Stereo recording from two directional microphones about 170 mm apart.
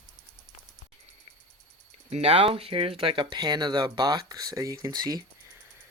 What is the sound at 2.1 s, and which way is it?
Speech, 40° right (ahead or behind).